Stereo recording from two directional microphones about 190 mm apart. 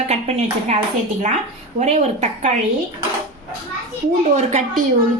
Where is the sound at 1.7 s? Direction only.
40° right (ahead or behind).